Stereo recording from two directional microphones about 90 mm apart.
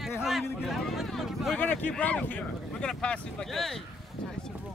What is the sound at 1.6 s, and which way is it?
Speech, 20° left (ahead or behind).